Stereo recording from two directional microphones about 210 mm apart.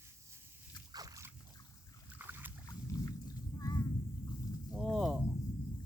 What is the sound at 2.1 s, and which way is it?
Boat, 10° right (ahead or behind).